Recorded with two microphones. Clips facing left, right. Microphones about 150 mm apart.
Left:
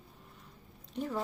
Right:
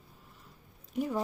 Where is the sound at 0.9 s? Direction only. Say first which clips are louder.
Right 4 dB; 10° right (ahead or behind).